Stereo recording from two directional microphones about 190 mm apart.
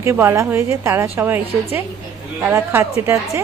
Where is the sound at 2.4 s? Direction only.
10° right (ahead or behind).